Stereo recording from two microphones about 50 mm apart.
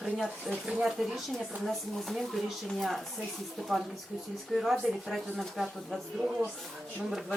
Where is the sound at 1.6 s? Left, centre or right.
Centre.